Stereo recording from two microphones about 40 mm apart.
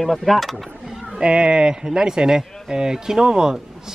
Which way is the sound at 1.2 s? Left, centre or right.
Right.